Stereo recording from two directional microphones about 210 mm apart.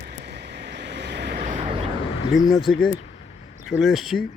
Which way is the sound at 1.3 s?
35° right (ahead or behind).